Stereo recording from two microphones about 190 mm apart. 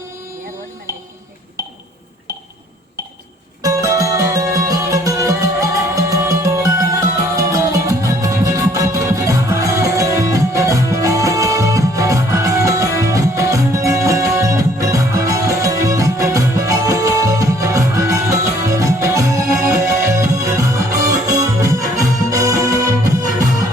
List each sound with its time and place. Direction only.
3.6 s music: 15° right (ahead or behind)